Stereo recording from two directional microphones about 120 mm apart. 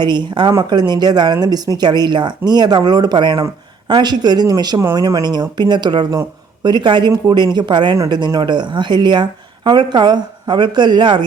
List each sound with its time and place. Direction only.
0.0 s speech: 40° right (ahead or behind)